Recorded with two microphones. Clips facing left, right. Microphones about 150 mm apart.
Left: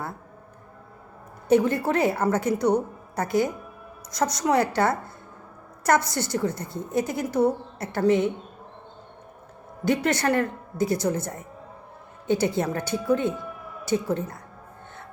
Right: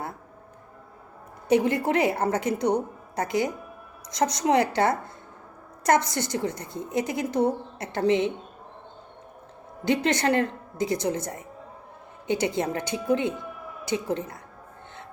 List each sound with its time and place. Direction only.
1.5 s a woman's voice: 20° right (ahead or behind)
9.8 s a woman's voice: 20° right (ahead or behind)